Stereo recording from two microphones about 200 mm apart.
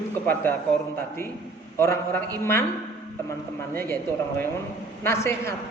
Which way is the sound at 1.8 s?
10° left (ahead or behind).